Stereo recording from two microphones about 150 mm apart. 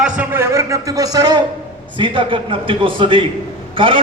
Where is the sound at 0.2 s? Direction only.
15° right (ahead or behind).